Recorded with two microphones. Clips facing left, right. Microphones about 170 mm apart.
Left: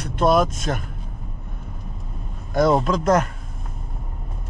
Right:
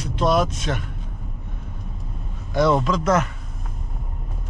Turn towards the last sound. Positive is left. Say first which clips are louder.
# left 1 dB
turn(degrees=45)  # may be behind; listen again after turning